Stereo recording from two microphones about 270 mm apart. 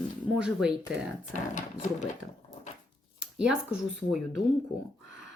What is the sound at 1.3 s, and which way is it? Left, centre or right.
Speech, left.